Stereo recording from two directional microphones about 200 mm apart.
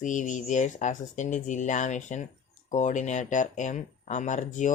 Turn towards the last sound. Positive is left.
turn(degrees=40)  # may be behind; listen again after turning